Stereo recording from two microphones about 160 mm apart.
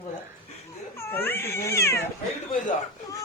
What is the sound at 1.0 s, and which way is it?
Speech, 15° left (ahead or behind).